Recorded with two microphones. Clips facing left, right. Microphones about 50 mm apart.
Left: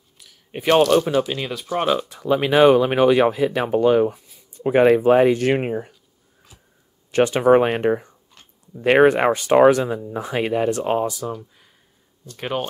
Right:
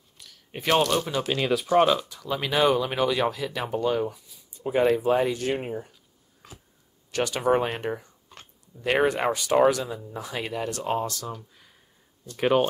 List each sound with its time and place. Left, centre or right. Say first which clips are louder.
0.2 s a sound: left 5 dB; centre
1.0 s speech: left 8 dB; centre
1.3 s speech: right 3 dB; centre
2.0 s speech: left 9 dB; left
4.6 s speech: left 7 dB; left
5.5 s speech: left 8 dB; left
7.1 s speech: left 8 dB; left
11.1 s speech: left 7 dB; centre